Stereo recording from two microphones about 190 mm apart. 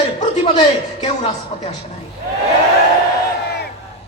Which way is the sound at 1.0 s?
30° left (ahead or behind).